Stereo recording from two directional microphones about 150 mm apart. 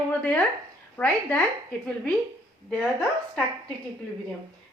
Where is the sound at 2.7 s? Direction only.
10° left (ahead or behind).